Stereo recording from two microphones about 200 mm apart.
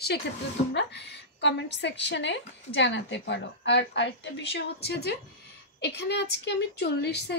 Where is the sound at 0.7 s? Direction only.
60° left (ahead or behind).